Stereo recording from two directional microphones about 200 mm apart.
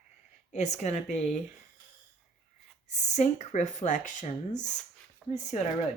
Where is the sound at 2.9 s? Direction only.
35° left (ahead or behind).